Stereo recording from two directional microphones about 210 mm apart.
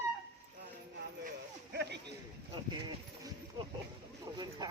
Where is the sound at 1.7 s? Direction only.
55° right (ahead or behind).